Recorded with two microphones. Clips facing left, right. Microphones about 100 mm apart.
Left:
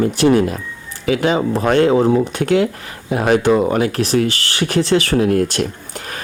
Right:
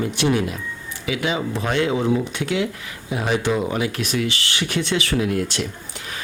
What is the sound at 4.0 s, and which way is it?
Speech, 40° left (ahead or behind).